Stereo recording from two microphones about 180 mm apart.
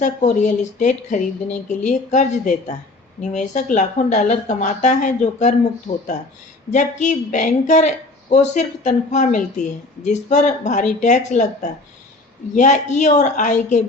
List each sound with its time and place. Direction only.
0.0 s speech: 40° left (ahead or behind)
6.7 s speech: 45° left (ahead or behind)